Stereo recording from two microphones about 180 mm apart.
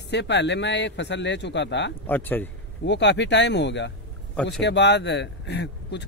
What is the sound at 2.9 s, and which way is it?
Speech, 75° left (ahead or behind).